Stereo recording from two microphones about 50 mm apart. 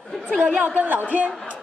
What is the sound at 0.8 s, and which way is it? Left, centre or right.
Speech, right.